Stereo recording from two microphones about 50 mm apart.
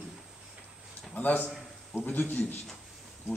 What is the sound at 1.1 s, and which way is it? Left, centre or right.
A man's voice, left.